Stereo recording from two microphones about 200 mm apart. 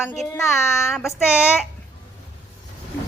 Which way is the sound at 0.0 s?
5° right (ahead or behind).